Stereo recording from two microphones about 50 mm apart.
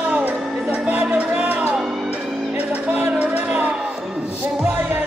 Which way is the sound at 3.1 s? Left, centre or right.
Right.